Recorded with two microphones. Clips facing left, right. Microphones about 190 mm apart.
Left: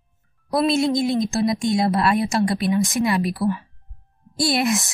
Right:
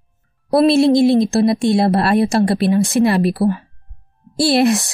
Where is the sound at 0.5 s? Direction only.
30° right (ahead or behind).